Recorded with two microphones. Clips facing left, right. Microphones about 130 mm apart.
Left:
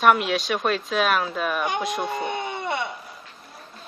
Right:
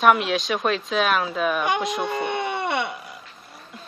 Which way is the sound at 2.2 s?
70° right (ahead or behind).